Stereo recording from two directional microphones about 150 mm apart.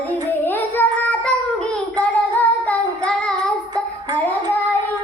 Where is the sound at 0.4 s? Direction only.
15° left (ahead or behind).